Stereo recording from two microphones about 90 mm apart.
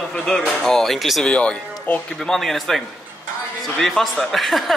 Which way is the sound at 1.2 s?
10° left (ahead or behind).